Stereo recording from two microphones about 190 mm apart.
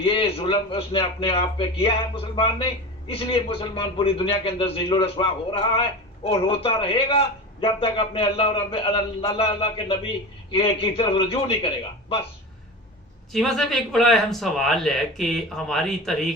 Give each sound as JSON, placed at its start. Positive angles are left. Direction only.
{"t": 0.0, "sound": "a man's voice", "side_deg": 30}
{"t": 13.3, "sound": "speech", "side_deg": 0}